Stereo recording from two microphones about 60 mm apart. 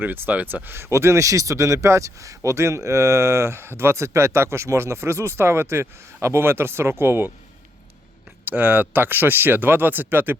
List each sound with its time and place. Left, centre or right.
0.0 s speech: right
8.4 s speech: right